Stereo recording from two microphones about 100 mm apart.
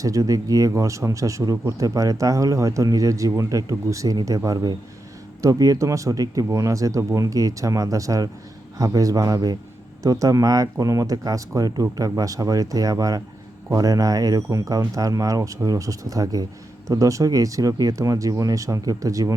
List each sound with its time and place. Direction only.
0.0 s speech: 35° right (ahead or behind)